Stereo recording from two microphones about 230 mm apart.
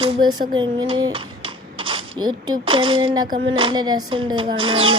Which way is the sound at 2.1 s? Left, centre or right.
Centre.